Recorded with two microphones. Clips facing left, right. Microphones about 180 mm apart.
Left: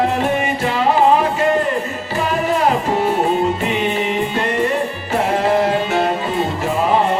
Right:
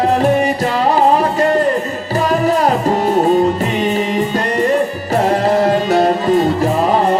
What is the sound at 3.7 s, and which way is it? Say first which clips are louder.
Music: right 3 dB; 40° right (ahead or behind).